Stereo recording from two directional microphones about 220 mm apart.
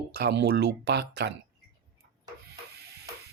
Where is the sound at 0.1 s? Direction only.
50° right (ahead or behind).